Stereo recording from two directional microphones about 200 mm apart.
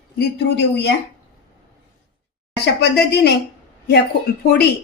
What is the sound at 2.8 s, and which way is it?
Speech, 55° left (ahead or behind).